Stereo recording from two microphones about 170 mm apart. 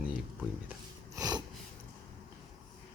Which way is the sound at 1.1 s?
20° right (ahead or behind).